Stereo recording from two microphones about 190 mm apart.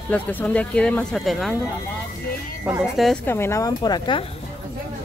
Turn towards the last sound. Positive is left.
turn(degrees=25)  # may be behind; listen again after turning